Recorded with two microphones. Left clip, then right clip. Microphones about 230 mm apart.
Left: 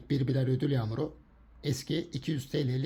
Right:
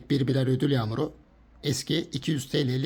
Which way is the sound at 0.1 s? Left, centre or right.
Centre.